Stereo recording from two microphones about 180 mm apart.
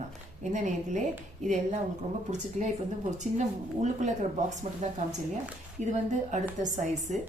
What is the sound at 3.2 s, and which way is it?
Speech, 40° right (ahead or behind).